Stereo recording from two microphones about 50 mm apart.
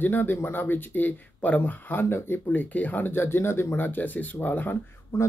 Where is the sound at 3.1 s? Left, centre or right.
Left.